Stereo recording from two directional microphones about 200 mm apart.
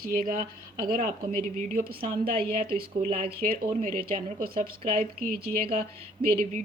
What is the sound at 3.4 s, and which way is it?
Speech, 40° right (ahead or behind).